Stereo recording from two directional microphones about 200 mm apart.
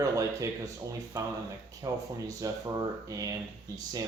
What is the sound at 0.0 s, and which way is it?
Speech, 15° right (ahead or behind).